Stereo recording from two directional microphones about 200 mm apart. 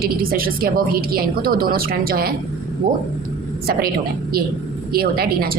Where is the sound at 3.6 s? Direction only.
50° right (ahead or behind).